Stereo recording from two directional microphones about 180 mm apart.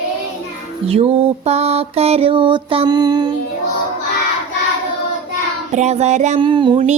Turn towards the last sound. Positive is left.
turn(degrees=-25)  # may be behind; listen again after turning